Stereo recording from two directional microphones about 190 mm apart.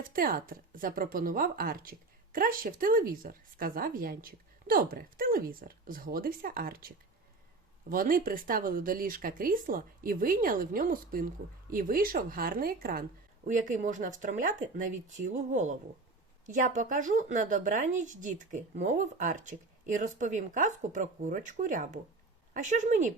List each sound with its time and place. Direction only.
0.0 s a woman's voice: 50° right (ahead or behind)